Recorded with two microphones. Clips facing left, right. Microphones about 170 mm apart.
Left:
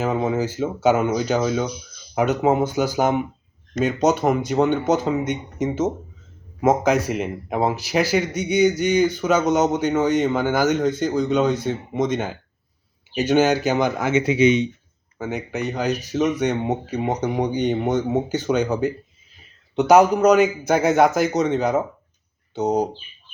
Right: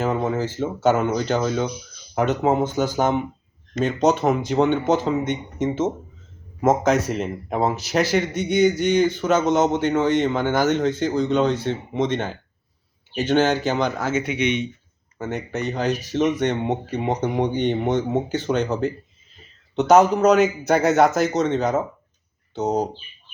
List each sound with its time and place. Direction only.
0.0 s speech: centre (ahead or behind)
6.6 s speech: 5° left (ahead or behind)
15.2 s speech: 5° left (ahead or behind)
21.3 s speech: 10° left (ahead or behind)
21.6 s speech: centre (ahead or behind)
22.5 s speech: 15° left (ahead or behind)